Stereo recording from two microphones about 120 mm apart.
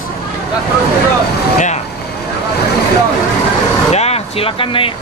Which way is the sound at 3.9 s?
60° left (ahead or behind).